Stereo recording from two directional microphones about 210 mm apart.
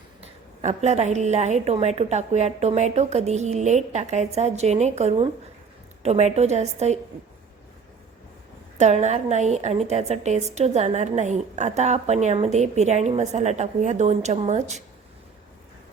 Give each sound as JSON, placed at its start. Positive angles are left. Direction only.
{"t": 0.2, "sound": "a woman's voice", "side_deg": -30}
{"t": 8.8, "sound": "a woman's voice", "side_deg": -35}